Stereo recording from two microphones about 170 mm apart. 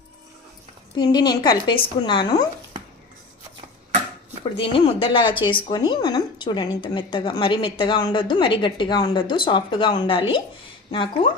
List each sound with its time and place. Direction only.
0.9 s a woman's voice: 25° left (ahead or behind)
4.5 s a woman's voice: 30° left (ahead or behind)